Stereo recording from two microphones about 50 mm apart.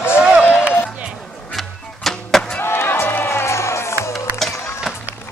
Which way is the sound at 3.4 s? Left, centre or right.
Left.